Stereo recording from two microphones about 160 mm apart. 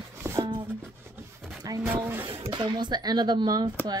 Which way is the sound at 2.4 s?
30° right (ahead or behind).